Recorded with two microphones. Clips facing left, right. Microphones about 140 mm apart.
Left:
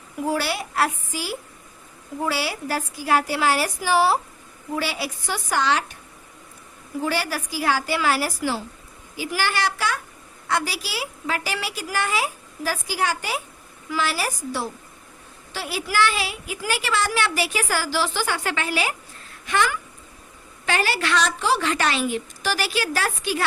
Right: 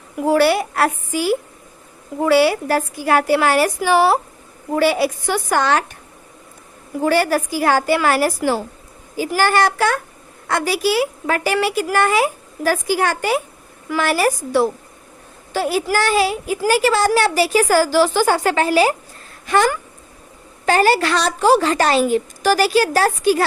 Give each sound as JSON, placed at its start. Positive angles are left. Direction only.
{"t": 0.2, "sound": "a woman's voice", "side_deg": -60}
{"t": 7.0, "sound": "a woman's voice", "side_deg": -50}
{"t": 15.5, "sound": "a woman's voice", "side_deg": -45}